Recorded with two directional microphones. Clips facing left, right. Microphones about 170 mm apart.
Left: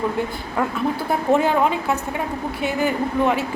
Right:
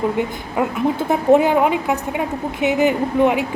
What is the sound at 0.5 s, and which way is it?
A woman's voice, 15° right (ahead or behind).